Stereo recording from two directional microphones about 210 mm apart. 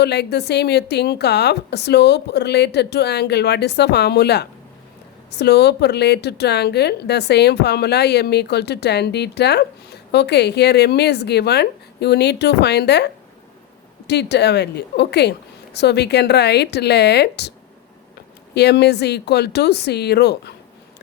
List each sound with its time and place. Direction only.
0.0 s a woman's voice: 50° left (ahead or behind)
14.1 s a woman's voice: 55° left (ahead or behind)
18.5 s a woman's voice: 50° left (ahead or behind)